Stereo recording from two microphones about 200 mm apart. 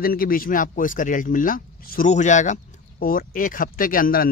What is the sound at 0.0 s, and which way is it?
Speech, 45° left (ahead or behind).